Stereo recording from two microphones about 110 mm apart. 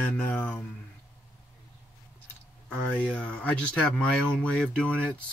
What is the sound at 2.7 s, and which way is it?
Speech, 15° left (ahead or behind).